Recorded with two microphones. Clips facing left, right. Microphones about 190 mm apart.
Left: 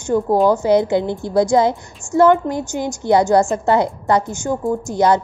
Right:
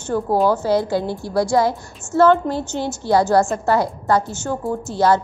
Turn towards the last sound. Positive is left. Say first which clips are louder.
# left 2 dB
turn(degrees=15)  # may be behind; listen again after turning